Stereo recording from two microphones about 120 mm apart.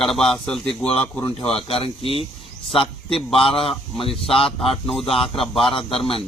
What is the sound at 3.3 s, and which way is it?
Speech, 50° left (ahead or behind).